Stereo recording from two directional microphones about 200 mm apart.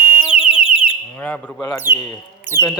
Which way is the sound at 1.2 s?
5° left (ahead or behind).